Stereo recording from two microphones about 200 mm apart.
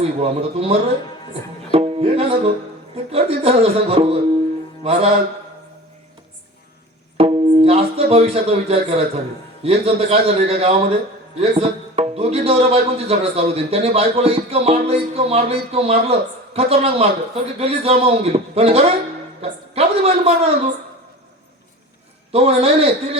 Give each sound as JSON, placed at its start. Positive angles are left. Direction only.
{"t": 0.0, "sound": "a man's voice", "side_deg": -30}
{"t": 1.7, "sound": "music", "side_deg": -30}
{"t": 2.9, "sound": "a man's voice", "side_deg": -30}
{"t": 7.2, "sound": "a man's voice", "side_deg": -30}
{"t": 22.3, "sound": "speech", "side_deg": -30}